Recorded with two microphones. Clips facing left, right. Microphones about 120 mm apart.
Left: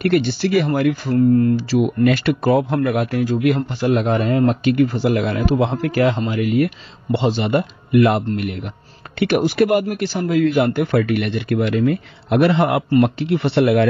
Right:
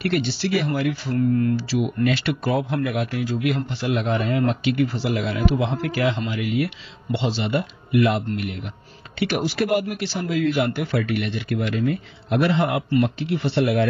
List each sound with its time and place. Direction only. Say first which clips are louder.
0.0 s speech: left 6 dB; 50° left (ahead or behind); by 13.8 s 65° left (ahead or behind)